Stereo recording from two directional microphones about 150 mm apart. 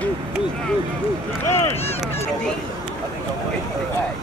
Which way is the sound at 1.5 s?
15° left (ahead or behind).